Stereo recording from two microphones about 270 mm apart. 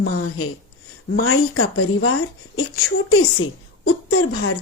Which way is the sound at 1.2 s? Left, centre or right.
Left.